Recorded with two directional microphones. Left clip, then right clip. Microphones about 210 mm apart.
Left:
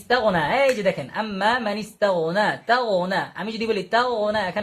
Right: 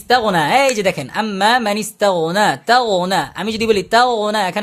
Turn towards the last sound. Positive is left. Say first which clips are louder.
# right 6 dB
turn(degrees=-60)  # may be behind; listen again after turning